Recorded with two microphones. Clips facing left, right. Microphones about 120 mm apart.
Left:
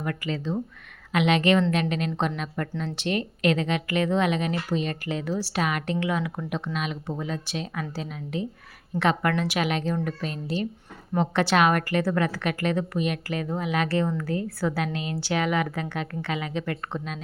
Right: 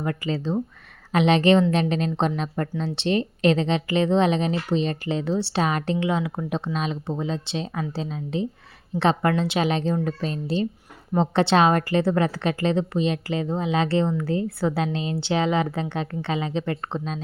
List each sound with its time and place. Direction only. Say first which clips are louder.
0.0 s speech: right 3 dB; 30° right (ahead or behind)